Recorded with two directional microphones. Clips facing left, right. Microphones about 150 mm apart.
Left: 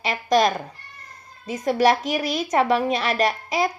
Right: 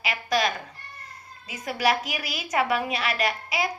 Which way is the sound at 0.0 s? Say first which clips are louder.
Left 6 dB; 35° left (ahead or behind).